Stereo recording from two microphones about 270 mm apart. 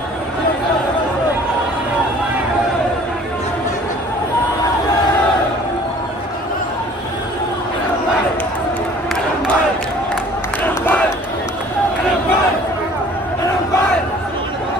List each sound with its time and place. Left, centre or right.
10.6 s crowd: centre